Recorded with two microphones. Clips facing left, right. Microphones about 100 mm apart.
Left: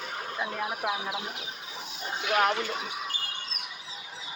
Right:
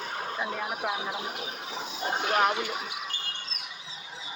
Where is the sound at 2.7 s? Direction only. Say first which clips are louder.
Left 1 dB; centre (ahead or behind).